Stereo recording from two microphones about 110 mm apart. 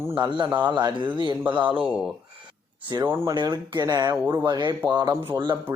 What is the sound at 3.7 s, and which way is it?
Speech, 35° right (ahead or behind).